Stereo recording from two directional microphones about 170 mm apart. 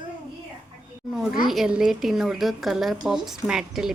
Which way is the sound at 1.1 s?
Centre (ahead or behind).